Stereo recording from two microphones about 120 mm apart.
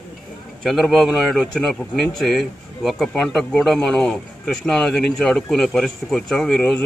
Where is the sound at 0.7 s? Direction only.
Centre (ahead or behind).